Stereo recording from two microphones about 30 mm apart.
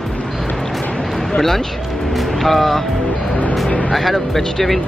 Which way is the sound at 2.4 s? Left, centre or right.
Centre.